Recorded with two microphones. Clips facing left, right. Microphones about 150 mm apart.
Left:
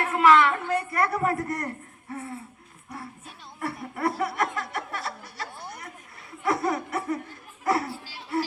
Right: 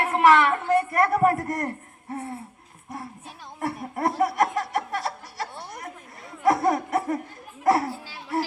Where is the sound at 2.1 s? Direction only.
40° right (ahead or behind).